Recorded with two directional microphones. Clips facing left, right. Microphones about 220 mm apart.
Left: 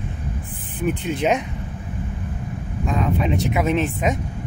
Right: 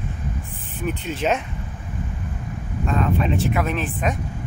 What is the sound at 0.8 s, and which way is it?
Speech, 15° left (ahead or behind).